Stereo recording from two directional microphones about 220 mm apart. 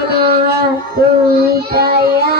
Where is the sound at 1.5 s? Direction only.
45° right (ahead or behind).